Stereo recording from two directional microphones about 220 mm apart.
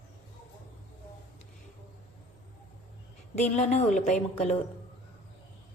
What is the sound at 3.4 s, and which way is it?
A woman's voice, 30° left (ahead or behind).